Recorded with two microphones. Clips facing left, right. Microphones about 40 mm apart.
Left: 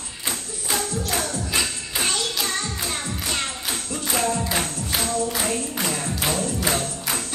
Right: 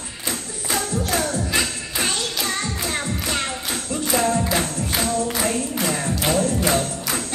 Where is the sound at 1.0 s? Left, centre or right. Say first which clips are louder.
Right 3 dB; right.